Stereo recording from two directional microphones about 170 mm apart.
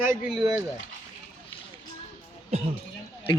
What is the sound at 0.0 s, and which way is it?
Speech, 15° right (ahead or behind).